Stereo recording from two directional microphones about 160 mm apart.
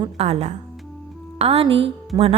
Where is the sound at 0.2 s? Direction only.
45° right (ahead or behind).